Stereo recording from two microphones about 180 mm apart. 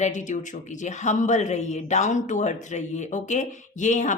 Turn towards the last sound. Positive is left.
turn(degrees=45)  # may be behind; listen again after turning